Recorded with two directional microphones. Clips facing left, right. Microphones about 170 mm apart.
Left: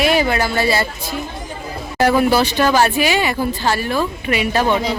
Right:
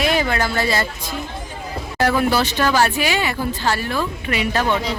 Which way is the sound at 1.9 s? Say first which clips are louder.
Left 4 dB; 15° left (ahead or behind).